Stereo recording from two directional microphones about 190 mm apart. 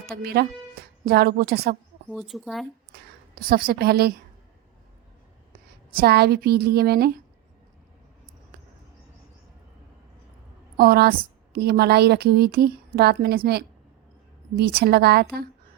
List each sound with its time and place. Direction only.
0.1 s a woman's voice: 55° right (ahead or behind)
2.0 s speech: centre (ahead or behind)
3.3 s a woman's voice: 55° right (ahead or behind)
5.9 s a woman's voice: 55° right (ahead or behind)
10.8 s a woman's voice: 55° right (ahead or behind)